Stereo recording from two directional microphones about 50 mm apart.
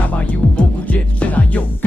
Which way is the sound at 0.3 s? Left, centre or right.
Left.